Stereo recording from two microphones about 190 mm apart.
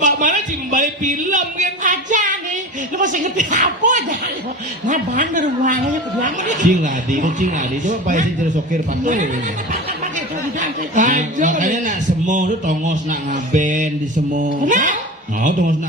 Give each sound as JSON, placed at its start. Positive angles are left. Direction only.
{"t": 0.0, "sound": "a sound", "side_deg": -40}
{"t": 3.0, "sound": "speech", "side_deg": -40}
{"t": 10.6, "sound": "speech", "side_deg": -40}